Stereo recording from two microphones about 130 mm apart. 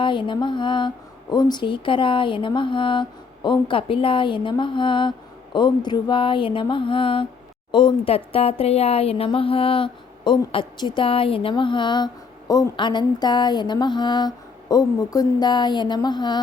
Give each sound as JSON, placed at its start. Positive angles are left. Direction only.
{"t": 0.0, "sound": "speech", "side_deg": 40}